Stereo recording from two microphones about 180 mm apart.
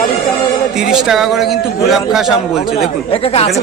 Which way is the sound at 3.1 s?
30° left (ahead or behind).